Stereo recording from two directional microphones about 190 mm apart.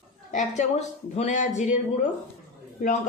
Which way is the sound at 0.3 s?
40° left (ahead or behind).